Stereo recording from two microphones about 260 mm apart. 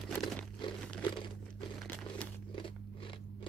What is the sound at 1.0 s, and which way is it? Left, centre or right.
Crumpling, centre.